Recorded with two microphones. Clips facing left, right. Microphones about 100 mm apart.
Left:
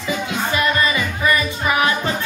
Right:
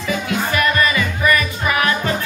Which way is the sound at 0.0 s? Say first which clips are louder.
Right 2 dB; 20° left (ahead or behind).